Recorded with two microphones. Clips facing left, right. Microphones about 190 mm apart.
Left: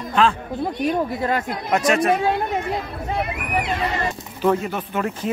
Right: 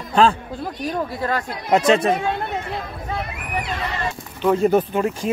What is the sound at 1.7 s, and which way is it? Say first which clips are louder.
Speech: right 2 dB; 25° right (ahead or behind).